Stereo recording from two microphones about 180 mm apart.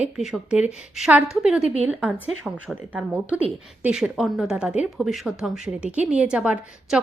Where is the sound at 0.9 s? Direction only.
5° right (ahead or behind).